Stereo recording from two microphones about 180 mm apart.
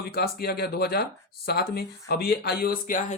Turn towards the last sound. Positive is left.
turn(degrees=50)  # may be behind; listen again after turning